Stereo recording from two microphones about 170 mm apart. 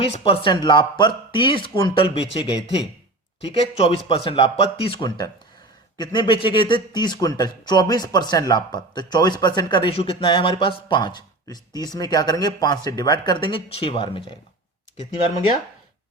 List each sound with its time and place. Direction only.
0.0 s a man's voice: 35° left (ahead or behind)